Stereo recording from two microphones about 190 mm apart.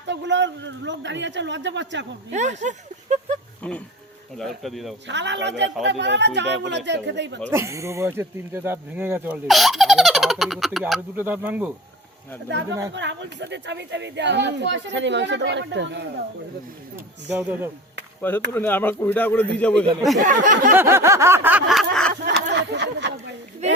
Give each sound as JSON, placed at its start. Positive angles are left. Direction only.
{"t": 0.1, "sound": "speech", "side_deg": -70}
{"t": 2.3, "sound": "speech", "side_deg": -40}
{"t": 3.6, "sound": "speech", "side_deg": 5}
{"t": 5.0, "sound": "speech", "side_deg": -70}
{"t": 7.5, "sound": "speech", "side_deg": -15}
{"t": 12.9, "sound": "speech", "side_deg": -70}
{"t": 17.2, "sound": "speech", "side_deg": -10}
{"t": 18.2, "sound": "speech", "side_deg": 10}
{"t": 20.1, "sound": "a sound", "side_deg": -45}
{"t": 20.7, "sound": "speech", "side_deg": -15}
{"t": 22.1, "sound": "snicker", "side_deg": -60}
{"t": 22.5, "sound": "a sound", "side_deg": -65}